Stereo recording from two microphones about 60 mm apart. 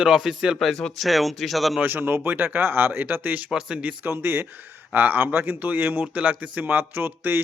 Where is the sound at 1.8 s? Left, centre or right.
Right.